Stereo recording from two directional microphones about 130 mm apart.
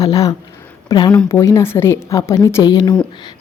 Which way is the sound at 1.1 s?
20° left (ahead or behind).